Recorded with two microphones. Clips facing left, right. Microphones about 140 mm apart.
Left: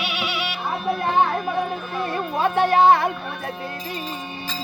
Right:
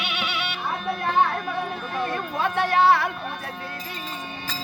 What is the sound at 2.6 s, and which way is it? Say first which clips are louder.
Music: left 4 dB; 15° left (ahead or behind).